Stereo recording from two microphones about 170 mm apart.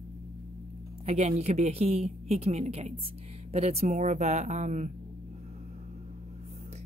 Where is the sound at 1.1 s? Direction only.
40° right (ahead or behind).